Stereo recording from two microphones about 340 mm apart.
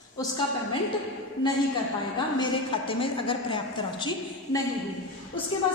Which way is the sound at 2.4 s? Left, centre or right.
Centre.